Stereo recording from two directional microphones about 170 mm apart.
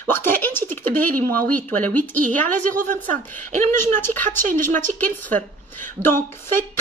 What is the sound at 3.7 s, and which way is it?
A woman's voice, 15° left (ahead or behind).